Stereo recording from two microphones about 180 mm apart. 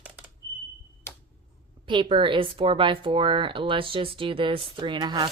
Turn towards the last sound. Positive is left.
turn(degrees=-25)  # may be behind; listen again after turning